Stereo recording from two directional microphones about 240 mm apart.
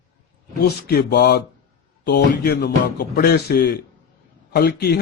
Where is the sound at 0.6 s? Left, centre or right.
Left.